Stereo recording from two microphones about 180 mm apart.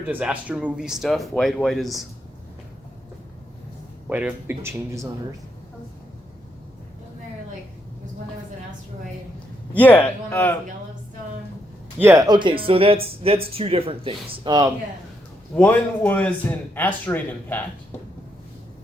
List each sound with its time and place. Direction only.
0.1 s speech: 5° right (ahead or behind)
4.1 s speech: 5° right (ahead or behind)
9.7 s a man's voice: 10° left (ahead or behind)
11.9 s speech: 15° right (ahead or behind)
15.5 s a man's voice: 10° left (ahead or behind)